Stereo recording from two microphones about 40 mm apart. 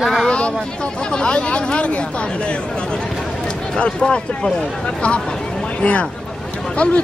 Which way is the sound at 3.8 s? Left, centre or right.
Left.